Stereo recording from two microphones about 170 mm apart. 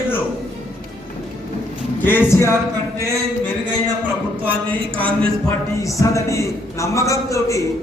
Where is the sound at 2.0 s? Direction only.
10° left (ahead or behind).